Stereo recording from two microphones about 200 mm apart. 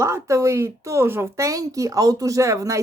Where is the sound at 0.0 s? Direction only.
15° right (ahead or behind).